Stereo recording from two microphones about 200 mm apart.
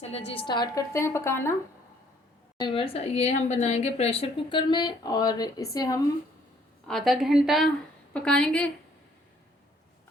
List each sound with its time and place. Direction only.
0.3 s a woman's voice: 20° left (ahead or behind)
2.6 s speech: 25° left (ahead or behind)
6.8 s a woman's voice: centre (ahead or behind)